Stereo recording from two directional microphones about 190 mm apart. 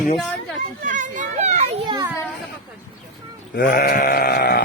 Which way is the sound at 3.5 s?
45° left (ahead or behind).